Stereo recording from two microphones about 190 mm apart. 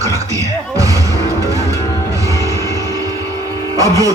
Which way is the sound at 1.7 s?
15° left (ahead or behind).